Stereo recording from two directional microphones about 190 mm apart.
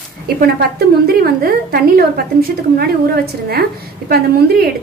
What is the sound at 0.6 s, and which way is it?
A woman's voice, 55° right (ahead or behind).